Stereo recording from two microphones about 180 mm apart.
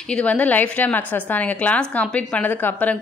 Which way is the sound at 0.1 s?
5° left (ahead or behind).